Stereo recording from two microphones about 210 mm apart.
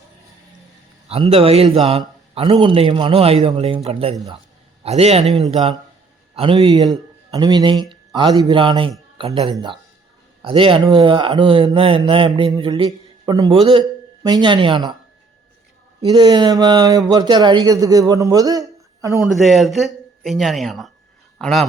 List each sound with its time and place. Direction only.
1.0 s mantra: 30° right (ahead or behind)
4.8 s a man's voice: 30° right (ahead or behind)
5.2 s speech: centre (ahead or behind)
5.5 s mantra: 25° right (ahead or behind)
7.3 s a man's voice: 20° right (ahead or behind)
10.4 s mantra: 25° right (ahead or behind)
16.0 s speech: 20° right (ahead or behind)
19.2 s a man's voice: centre (ahead or behind)